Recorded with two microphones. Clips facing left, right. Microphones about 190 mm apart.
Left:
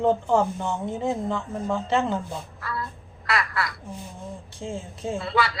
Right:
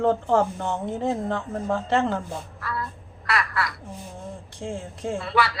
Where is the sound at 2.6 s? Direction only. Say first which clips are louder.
Right 1 dB; 25° left (ahead or behind).